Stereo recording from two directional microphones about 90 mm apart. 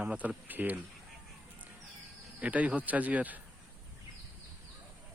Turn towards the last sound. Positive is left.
turn(degrees=-15)  # may be behind; listen again after turning